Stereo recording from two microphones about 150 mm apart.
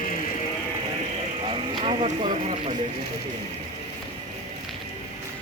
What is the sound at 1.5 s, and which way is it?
Speech, 35° right (ahead or behind).